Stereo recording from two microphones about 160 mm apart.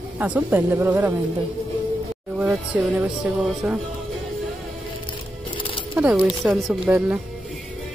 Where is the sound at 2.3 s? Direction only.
10° right (ahead or behind).